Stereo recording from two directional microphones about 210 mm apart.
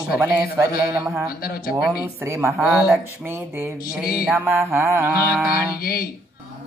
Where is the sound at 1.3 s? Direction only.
45° left (ahead or behind).